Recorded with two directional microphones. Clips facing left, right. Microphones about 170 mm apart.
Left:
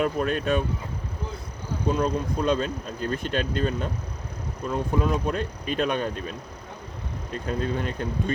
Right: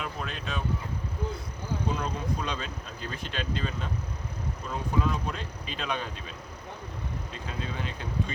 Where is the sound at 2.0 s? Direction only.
45° left (ahead or behind).